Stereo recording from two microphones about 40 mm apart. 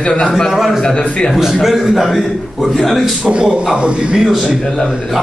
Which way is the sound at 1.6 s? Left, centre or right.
Centre.